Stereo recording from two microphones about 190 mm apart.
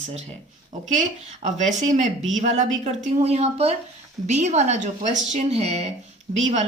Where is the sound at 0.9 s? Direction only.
40° right (ahead or behind).